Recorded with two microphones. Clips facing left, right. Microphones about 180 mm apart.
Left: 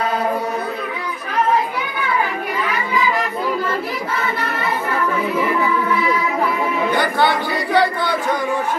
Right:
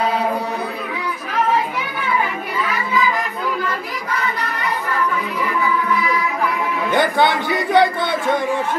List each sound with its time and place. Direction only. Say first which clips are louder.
6.9 s speech: right 3 dB; 20° right (ahead or behind)